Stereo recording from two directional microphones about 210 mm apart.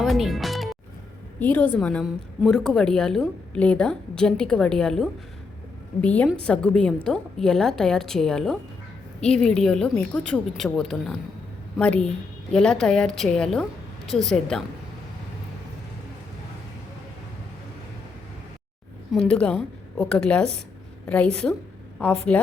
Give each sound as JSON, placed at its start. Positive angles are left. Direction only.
{"t": 0.0, "sound": "music", "side_deg": 0}
{"t": 1.4, "sound": "a woman's voice", "side_deg": 10}
{"t": 19.1, "sound": "a woman's voice", "side_deg": 5}